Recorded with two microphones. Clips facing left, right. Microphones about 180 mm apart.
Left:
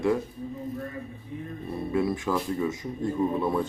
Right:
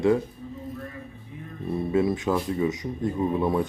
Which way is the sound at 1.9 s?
20° right (ahead or behind).